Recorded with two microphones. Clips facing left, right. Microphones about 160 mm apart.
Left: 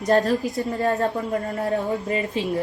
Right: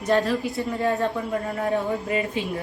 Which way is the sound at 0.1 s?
40° left (ahead or behind).